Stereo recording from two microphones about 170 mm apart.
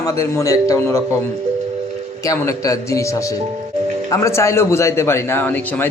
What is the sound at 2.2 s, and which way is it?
Speech, 20° left (ahead or behind).